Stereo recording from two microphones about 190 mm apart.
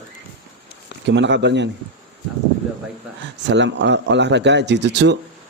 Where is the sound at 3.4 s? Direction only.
65° right (ahead or behind).